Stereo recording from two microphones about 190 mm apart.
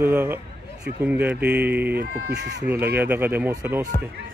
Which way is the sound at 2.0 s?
50° right (ahead or behind).